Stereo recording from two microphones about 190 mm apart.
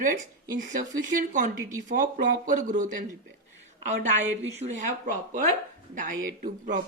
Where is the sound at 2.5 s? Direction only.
45° right (ahead or behind).